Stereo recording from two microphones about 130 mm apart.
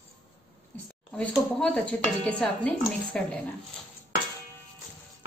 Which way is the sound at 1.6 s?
5° left (ahead or behind).